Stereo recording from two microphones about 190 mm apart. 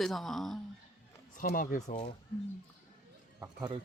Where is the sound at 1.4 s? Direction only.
45° left (ahead or behind).